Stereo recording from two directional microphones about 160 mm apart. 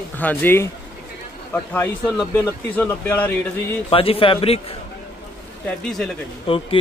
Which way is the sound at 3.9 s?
35° left (ahead or behind).